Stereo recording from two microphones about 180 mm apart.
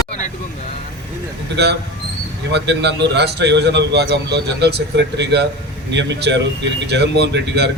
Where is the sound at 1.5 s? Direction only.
70° right (ahead or behind).